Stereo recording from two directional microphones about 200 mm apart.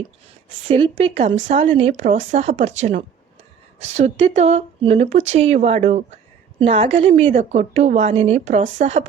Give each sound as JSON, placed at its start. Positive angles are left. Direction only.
{"t": 1.0, "sound": "a woman's voice", "side_deg": -30}